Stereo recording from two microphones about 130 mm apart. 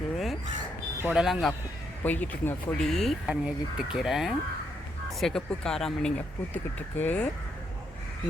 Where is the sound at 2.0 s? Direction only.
15° left (ahead or behind).